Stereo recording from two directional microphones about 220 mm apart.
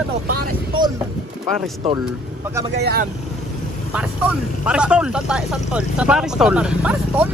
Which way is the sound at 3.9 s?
5° right (ahead or behind).